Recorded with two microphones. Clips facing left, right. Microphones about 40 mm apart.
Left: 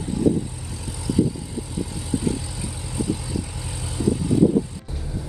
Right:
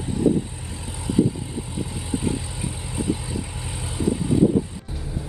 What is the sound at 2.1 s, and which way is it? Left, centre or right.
Vehicle, right.